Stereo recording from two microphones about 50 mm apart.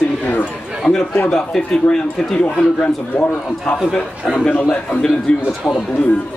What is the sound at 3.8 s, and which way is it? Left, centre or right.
Speech, centre.